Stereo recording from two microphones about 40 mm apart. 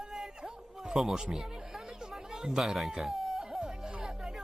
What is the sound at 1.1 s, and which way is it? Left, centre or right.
Chatter, centre.